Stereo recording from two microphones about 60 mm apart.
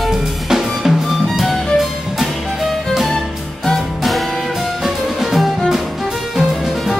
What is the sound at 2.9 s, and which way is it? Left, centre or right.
Music, centre.